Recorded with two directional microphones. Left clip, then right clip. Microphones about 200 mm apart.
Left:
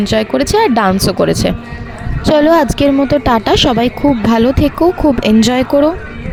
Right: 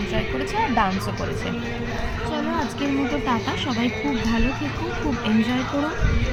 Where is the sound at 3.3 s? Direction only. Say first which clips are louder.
Left 14 dB; 55° left (ahead or behind).